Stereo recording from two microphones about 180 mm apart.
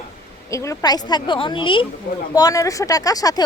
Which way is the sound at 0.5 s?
15° left (ahead or behind).